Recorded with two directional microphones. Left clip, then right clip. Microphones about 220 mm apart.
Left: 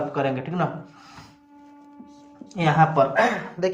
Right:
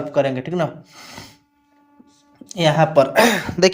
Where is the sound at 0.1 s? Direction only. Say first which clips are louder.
Right 6 dB; 55° right (ahead or behind).